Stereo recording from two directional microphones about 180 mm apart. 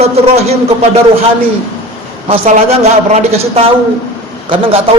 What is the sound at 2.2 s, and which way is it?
A man's voice, 30° right (ahead or behind).